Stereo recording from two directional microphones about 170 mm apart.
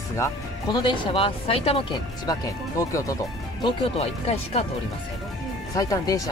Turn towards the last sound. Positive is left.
turn(degrees=20)  # may be behind; listen again after turning